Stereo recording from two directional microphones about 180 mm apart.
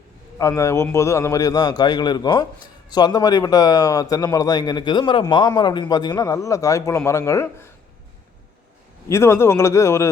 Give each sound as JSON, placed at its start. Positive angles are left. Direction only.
{"t": 0.3, "sound": "a man's voice", "side_deg": 15}
{"t": 9.0, "sound": "a man's voice", "side_deg": 15}